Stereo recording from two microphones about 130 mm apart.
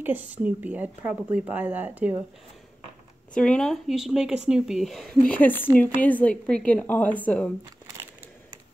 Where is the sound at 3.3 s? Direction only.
10° left (ahead or behind).